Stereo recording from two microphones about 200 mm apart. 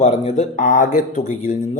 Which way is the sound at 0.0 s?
35° left (ahead or behind).